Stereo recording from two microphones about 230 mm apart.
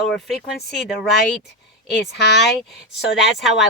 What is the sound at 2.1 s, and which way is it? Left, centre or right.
Speech, left.